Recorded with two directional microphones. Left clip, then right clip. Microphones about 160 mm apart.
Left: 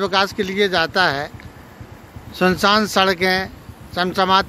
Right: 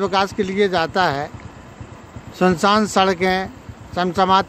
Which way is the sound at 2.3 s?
10° right (ahead or behind).